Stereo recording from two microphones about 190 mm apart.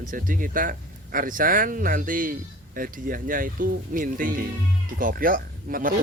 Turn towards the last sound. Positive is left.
turn(degrees=-45)  # may be behind; listen again after turning